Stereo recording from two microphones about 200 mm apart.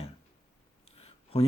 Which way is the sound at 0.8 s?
30° left (ahead or behind).